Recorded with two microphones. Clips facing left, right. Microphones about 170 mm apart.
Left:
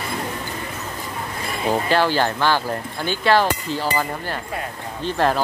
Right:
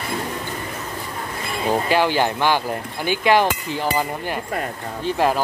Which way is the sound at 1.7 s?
15° right (ahead or behind).